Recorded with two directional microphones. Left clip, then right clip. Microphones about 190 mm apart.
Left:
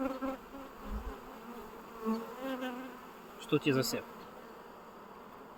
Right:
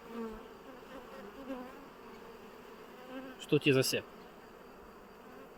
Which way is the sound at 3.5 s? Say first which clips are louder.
Right 2 dB; 35° right (ahead or behind).